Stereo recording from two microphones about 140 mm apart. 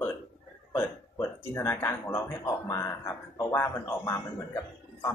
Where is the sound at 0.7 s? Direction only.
15° left (ahead or behind).